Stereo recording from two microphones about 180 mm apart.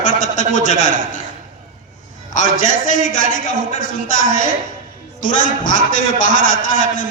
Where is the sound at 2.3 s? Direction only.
45° left (ahead or behind).